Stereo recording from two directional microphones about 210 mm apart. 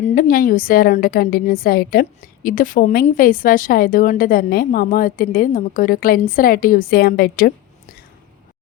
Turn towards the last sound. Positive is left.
turn(degrees=45)  # may be behind; listen again after turning